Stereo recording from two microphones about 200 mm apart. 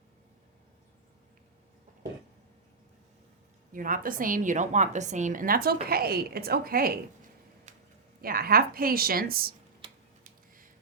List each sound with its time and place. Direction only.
3.7 s a woman's voice: 45° right (ahead or behind)
8.2 s a woman's voice: 50° right (ahead or behind)